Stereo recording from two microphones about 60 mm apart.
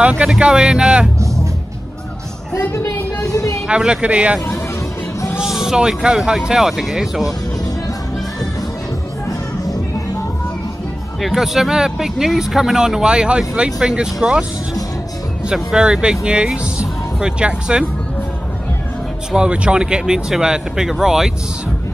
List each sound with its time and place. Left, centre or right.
0.2 s speech: centre
2.7 s a sound: left
3.6 s speech: centre
5.4 s speech: centre
11.1 s speech: centre
15.5 s speech: centre
19.3 s speech: centre